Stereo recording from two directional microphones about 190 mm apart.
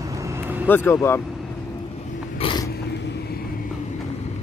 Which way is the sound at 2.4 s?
25° left (ahead or behind).